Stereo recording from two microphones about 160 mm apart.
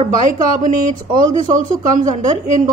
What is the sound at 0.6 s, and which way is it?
A woman's voice, 55° right (ahead or behind).